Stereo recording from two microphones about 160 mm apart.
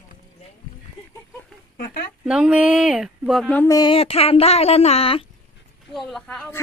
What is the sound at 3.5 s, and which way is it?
Speech, 20° left (ahead or behind).